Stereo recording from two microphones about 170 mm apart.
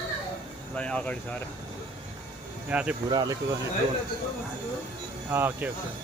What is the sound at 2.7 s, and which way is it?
Speech, 5° right (ahead or behind).